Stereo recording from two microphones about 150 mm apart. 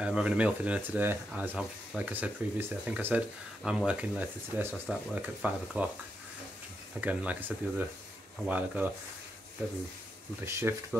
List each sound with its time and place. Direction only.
0.0 s speech: 10° right (ahead or behind)
7.0 s speech: 10° right (ahead or behind)
10.4 s speech: 15° right (ahead or behind)